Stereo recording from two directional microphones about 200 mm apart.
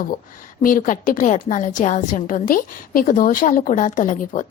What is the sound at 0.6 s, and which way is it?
A woman's voice, 45° left (ahead or behind).